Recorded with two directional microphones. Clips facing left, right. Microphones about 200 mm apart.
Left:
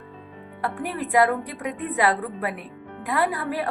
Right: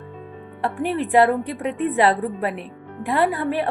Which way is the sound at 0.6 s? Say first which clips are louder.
Right 5 dB; 25° right (ahead or behind).